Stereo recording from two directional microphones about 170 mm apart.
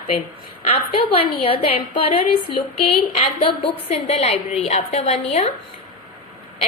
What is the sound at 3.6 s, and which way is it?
A woman's voice, 35° left (ahead or behind).